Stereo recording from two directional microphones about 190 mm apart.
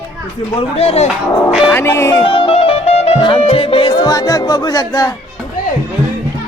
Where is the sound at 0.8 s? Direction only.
30° left (ahead or behind).